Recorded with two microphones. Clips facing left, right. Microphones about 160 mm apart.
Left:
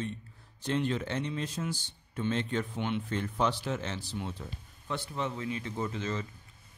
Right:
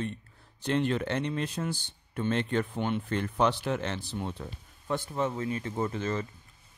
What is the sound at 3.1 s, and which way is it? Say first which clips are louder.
A man's voice: right 5 dB; 65° right (ahead or behind).